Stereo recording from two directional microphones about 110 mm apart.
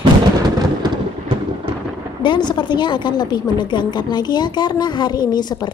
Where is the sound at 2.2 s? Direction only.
45° left (ahead or behind).